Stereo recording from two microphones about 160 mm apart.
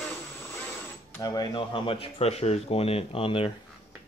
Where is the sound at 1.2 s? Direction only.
25° left (ahead or behind).